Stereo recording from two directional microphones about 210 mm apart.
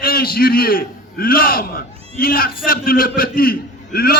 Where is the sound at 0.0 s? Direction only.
45° left (ahead or behind).